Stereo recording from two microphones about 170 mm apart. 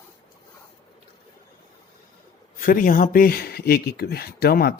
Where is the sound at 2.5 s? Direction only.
55° left (ahead or behind).